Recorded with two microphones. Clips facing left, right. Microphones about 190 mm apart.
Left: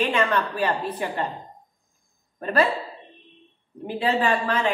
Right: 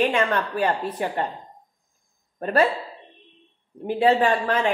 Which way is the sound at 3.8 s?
50° right (ahead or behind).